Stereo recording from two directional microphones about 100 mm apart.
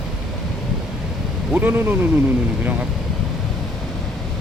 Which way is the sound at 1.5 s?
20° right (ahead or behind).